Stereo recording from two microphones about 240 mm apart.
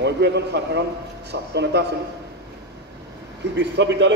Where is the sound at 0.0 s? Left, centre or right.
Right.